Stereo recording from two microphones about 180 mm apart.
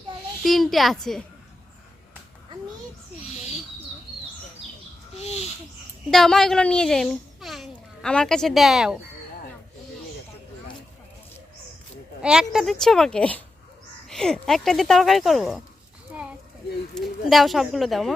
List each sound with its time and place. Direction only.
0.4 s speech: centre (ahead or behind)
6.1 s a child's voice: centre (ahead or behind)
12.2 s speech: 5° right (ahead or behind)
16.9 s speech: centre (ahead or behind)